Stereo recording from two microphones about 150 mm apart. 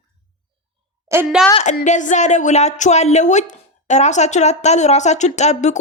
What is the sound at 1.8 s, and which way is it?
Speech, 55° left (ahead or behind).